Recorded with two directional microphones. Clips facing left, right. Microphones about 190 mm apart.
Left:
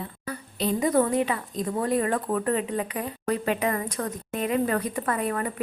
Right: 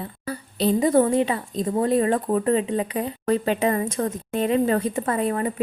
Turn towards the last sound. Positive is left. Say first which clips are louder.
# right 4 dB
turn(degrees=-25)  # may be behind; listen again after turning